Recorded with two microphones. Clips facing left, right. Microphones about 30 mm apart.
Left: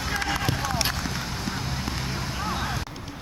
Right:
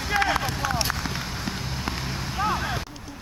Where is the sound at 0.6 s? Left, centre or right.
Centre.